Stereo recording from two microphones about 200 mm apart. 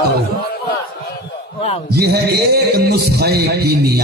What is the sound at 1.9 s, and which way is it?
A man's voice, 50° right (ahead or behind).